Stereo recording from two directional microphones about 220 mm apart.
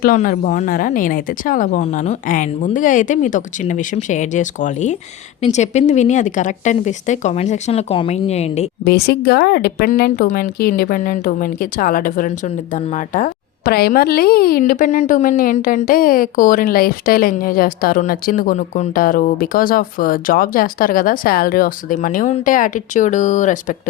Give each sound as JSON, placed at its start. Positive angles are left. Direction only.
{"t": 0.0, "sound": "a woman's voice", "side_deg": 40}
{"t": 8.8, "sound": "a woman's voice", "side_deg": 45}